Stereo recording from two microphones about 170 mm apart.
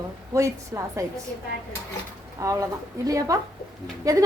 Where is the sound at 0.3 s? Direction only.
20° right (ahead or behind).